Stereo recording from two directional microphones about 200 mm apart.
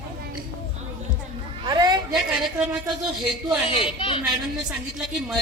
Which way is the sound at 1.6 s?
20° right (ahead or behind).